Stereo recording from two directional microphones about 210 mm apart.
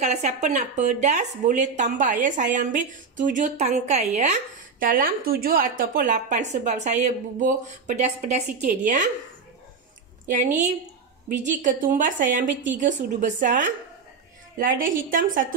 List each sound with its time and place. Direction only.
0.0 s speech: 30° right (ahead or behind)
10.2 s speech: 35° right (ahead or behind)